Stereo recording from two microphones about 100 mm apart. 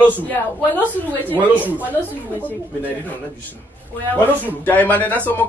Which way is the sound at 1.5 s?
15° left (ahead or behind).